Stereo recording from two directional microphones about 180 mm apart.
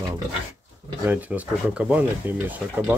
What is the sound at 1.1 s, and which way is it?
Speech, 10° right (ahead or behind).